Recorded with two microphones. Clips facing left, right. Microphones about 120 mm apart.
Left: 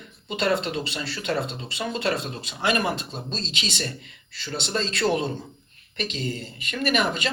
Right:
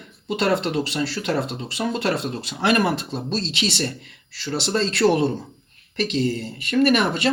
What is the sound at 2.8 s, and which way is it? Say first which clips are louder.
Speech: right 5 dB; 70° right (ahead or behind).